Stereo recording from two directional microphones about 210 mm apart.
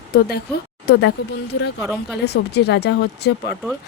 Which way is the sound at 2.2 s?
50° left (ahead or behind).